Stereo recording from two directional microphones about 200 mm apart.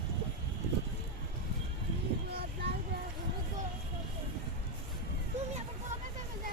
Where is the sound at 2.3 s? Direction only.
55° right (ahead or behind).